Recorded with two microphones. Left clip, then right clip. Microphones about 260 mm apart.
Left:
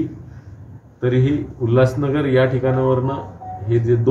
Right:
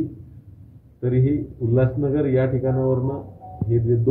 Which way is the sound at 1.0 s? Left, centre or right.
Centre.